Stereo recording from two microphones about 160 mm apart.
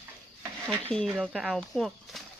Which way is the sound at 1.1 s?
5° right (ahead or behind).